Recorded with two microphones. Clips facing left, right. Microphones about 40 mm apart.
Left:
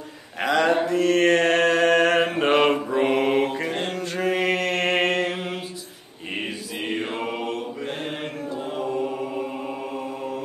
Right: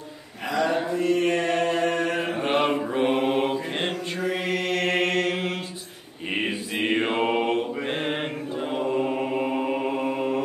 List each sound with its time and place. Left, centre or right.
0.5 s mantra: left
4.2 s mantra: left
6.4 s mantra: right
8.7 s mantra: right